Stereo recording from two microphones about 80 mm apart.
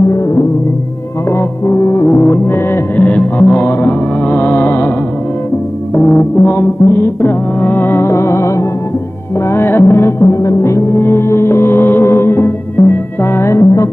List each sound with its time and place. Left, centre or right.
1.3 s music: left
5.9 s music: left
10.4 s gong: left